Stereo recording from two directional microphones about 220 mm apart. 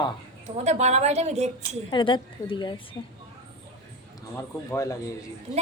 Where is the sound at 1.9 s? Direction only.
20° left (ahead or behind).